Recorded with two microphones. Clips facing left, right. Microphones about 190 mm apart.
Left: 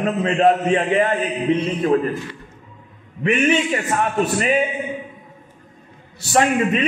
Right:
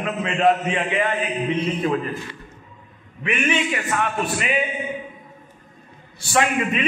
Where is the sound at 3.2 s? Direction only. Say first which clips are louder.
Left 5 dB; 40° left (ahead or behind).